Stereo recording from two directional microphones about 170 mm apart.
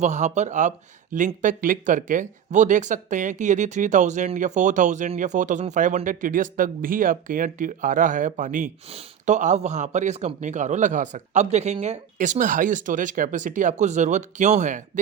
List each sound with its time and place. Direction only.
0.0 s speech: 45° right (ahead or behind)
8.9 s speech: 40° right (ahead or behind)